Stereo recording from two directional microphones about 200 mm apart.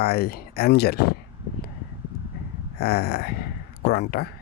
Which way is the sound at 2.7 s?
55° left (ahead or behind).